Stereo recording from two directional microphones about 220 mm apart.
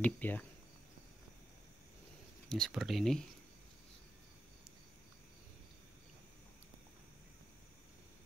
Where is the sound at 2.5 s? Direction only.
Centre (ahead or behind).